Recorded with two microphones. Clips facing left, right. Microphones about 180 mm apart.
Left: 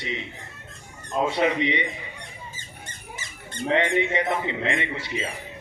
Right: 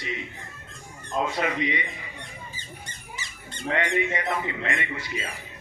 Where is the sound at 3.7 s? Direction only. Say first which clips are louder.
Left 3 dB; 25° left (ahead or behind).